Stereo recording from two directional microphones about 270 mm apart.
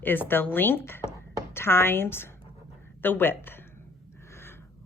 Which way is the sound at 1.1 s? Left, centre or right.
Centre.